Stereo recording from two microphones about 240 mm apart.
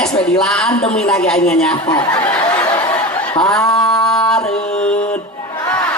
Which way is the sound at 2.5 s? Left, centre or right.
Centre.